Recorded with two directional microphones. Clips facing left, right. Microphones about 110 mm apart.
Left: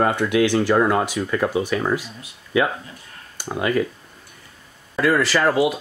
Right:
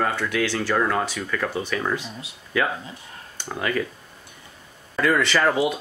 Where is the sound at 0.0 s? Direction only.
20° left (ahead or behind).